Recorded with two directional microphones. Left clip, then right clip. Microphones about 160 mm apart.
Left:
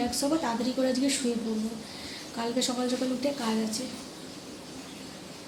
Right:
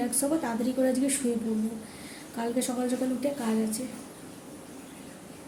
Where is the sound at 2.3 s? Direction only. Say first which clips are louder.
Left 1 dB; 20° right (ahead or behind).